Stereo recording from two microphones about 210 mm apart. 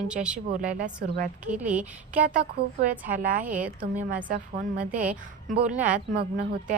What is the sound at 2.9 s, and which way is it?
A woman's voice, 40° right (ahead or behind).